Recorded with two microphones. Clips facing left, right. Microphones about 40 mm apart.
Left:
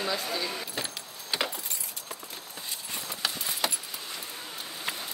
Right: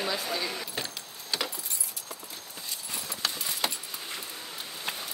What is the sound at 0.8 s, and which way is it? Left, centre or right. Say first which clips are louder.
Vehicle: left 1 dB; left.